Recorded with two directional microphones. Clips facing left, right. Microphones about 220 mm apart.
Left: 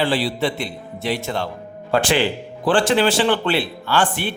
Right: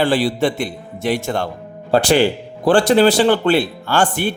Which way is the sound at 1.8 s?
40° right (ahead or behind).